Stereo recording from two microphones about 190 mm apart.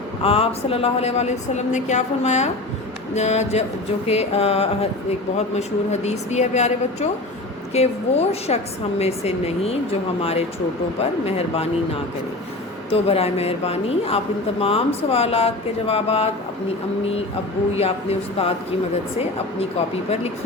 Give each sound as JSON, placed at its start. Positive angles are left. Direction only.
{"t": 0.2, "sound": "a woman's voice", "side_deg": 30}
{"t": 11.3, "sound": "a woman's voice", "side_deg": 30}
{"t": 12.9, "sound": "a woman's voice", "side_deg": 30}
{"t": 17.7, "sound": "a woman's voice", "side_deg": 30}